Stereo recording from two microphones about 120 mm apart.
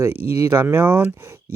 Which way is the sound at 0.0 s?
25° right (ahead or behind).